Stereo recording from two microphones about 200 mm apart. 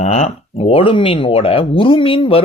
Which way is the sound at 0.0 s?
35° left (ahead or behind).